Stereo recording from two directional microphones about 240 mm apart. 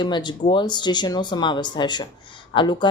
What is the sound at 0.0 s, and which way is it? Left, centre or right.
A woman's voice, centre.